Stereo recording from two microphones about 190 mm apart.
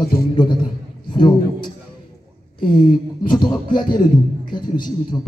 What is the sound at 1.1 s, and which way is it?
A man's voice, 25° left (ahead or behind).